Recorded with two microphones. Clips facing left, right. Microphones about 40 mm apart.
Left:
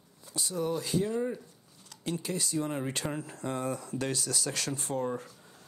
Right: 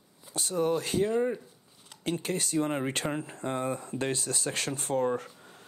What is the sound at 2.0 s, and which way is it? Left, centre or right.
Speech, right.